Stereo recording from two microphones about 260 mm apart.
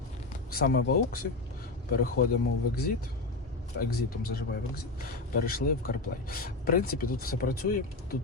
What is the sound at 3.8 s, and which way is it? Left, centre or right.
Speech, left.